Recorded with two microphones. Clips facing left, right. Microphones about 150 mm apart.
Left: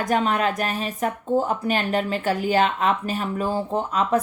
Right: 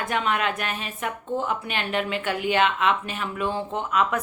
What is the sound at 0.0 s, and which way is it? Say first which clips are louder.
Speech: left 4 dB; 40° left (ahead or behind).